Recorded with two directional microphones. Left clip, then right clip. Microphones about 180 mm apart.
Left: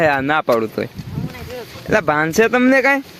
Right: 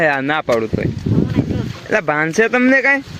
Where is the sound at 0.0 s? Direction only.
20° left (ahead or behind).